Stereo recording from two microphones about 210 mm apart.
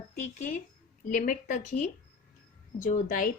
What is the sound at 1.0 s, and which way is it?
A woman's voice, 40° left (ahead or behind).